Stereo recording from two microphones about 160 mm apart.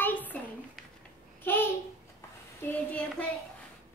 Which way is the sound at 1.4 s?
15° left (ahead or behind).